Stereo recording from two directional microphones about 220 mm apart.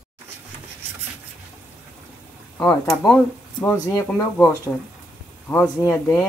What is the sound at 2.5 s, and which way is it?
Speech, 5° left (ahead or behind).